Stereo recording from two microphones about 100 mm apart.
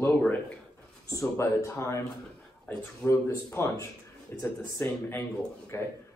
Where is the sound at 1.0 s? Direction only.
30° left (ahead or behind).